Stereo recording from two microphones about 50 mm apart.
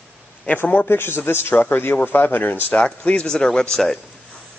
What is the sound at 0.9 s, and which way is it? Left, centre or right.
A man's voice, left.